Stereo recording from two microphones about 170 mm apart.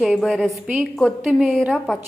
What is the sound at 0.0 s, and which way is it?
A woman's voice, centre (ahead or behind).